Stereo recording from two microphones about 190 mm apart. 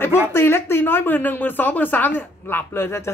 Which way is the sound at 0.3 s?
10° left (ahead or behind).